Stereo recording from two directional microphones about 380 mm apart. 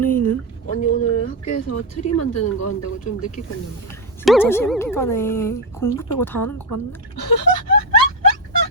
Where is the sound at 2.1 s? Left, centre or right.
Left.